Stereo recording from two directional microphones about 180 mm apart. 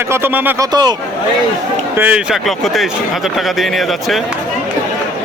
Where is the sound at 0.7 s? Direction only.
25° right (ahead or behind).